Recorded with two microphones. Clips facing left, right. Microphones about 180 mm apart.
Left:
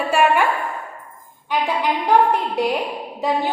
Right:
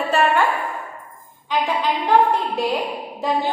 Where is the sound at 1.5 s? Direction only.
15° left (ahead or behind).